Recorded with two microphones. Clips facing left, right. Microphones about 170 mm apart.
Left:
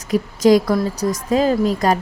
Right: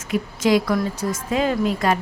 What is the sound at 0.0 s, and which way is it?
A woman's voice, 40° left (ahead or behind).